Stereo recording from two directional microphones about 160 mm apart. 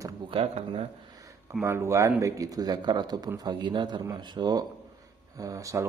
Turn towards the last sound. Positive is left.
turn(degrees=-20)  # may be behind; listen again after turning